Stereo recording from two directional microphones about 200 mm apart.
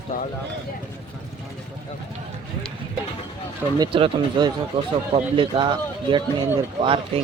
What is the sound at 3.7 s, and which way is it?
Speech, 25° right (ahead or behind).